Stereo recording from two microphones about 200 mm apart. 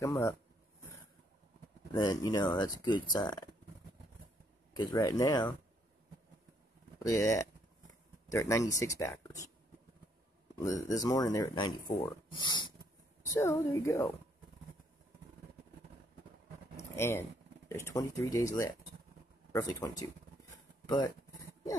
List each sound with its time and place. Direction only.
0.0 s speech: 15° left (ahead or behind)
2.0 s speech: 20° left (ahead or behind)
4.7 s speech: 15° left (ahead or behind)
7.0 s speech: 15° left (ahead or behind)
10.6 s speech: 15° left (ahead or behind)
16.9 s speech: 15° left (ahead or behind)